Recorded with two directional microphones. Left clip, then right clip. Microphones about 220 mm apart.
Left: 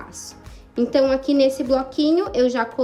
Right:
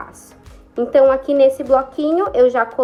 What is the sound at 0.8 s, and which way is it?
A woman's voice, 25° left (ahead or behind).